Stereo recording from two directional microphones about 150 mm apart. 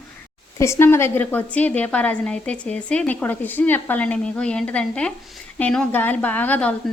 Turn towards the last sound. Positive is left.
turn(degrees=10)  # may be behind; listen again after turning